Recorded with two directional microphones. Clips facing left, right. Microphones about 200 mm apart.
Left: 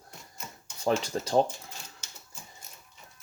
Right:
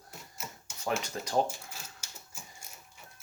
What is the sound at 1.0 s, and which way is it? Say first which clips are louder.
Speech: left 5 dB; 30° left (ahead or behind).